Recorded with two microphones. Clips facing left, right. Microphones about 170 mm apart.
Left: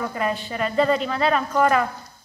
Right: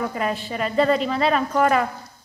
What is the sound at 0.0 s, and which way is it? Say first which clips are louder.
A woman's voice: even; centre (ahead or behind).